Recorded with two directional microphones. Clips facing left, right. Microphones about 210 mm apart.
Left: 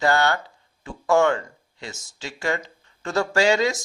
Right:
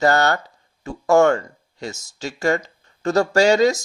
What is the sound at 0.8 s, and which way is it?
A man's voice, 40° right (ahead or behind).